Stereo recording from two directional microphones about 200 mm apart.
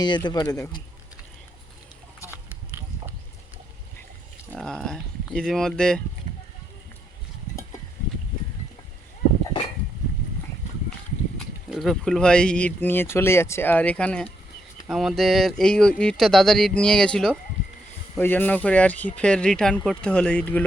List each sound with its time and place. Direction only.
0.0 s speech: 20° left (ahead or behind)
4.5 s a sound: 5° left (ahead or behind)
11.3 s speech: centre (ahead or behind)